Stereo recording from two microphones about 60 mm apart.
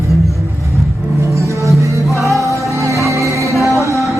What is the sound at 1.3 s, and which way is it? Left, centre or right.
Music, right.